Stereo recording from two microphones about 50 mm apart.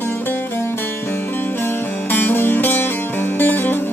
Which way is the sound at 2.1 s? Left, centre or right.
Left.